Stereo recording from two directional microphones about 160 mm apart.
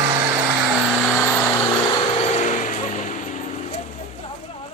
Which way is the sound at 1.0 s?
Centre (ahead or behind).